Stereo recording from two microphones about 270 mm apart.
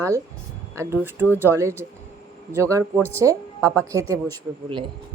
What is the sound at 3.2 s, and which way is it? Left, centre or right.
Speech, centre.